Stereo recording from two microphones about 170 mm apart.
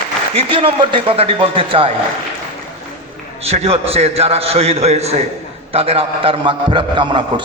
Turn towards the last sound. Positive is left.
turn(degrees=-30)  # may be behind; listen again after turning